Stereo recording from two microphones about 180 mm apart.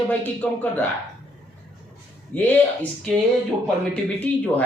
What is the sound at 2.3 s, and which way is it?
Speech, 10° left (ahead or behind).